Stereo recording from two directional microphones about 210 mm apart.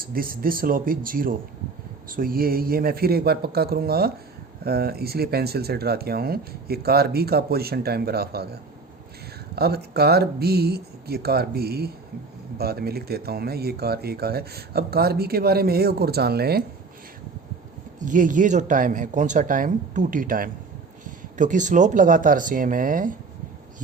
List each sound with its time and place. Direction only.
0.0 s speech: 45° right (ahead or behind)
9.6 s speech: 50° right (ahead or behind)
18.0 s speech: 40° right (ahead or behind)